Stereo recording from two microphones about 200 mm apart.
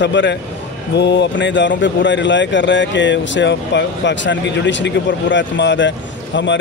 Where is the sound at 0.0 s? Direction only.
60° left (ahead or behind).